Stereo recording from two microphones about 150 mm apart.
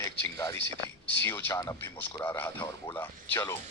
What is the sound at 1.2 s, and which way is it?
Speech, 15° left (ahead or behind).